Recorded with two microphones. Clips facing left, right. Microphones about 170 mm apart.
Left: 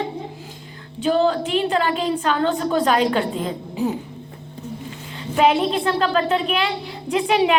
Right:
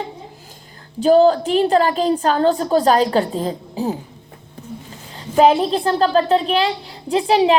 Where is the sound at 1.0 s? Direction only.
40° right (ahead or behind).